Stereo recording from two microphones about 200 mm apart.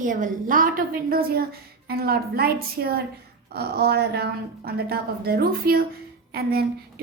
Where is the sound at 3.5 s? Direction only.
50° right (ahead or behind).